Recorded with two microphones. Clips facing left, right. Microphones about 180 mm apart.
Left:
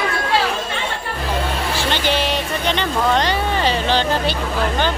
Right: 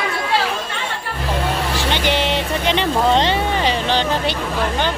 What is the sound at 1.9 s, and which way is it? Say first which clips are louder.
Music: right 1 dB; 20° right (ahead or behind).